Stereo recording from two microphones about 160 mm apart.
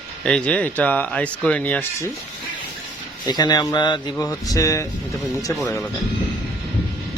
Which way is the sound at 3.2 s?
25° left (ahead or behind).